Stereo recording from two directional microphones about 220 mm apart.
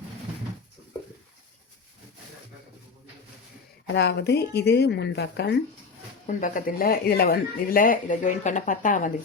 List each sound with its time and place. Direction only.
3.8 s a woman's voice: 50° left (ahead or behind)
6.2 s speech: 35° left (ahead or behind)